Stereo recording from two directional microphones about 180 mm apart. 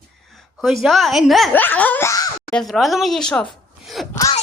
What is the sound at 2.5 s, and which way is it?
Speech, centre (ahead or behind).